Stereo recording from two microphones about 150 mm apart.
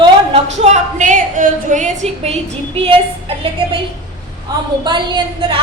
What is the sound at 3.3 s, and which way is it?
Speech, 40° right (ahead or behind).